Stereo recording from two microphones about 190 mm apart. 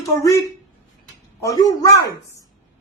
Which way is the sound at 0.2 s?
15° left (ahead or behind).